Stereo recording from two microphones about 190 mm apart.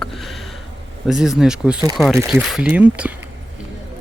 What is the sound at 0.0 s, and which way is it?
Sniff, centre (ahead or behind).